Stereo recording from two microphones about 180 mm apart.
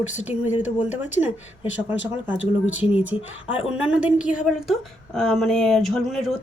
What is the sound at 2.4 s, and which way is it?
Speech, 90° left.